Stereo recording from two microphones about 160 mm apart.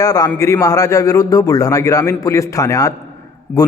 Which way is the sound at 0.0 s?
25° left (ahead or behind).